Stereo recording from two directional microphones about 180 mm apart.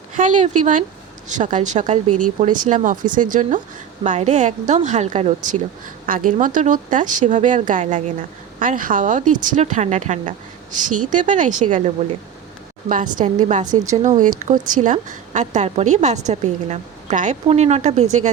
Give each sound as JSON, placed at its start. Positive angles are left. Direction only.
{"t": 0.2, "sound": "a woman's voice", "side_deg": -45}